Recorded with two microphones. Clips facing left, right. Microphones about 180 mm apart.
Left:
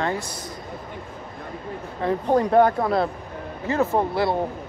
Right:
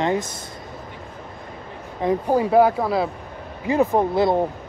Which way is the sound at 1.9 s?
15° right (ahead or behind).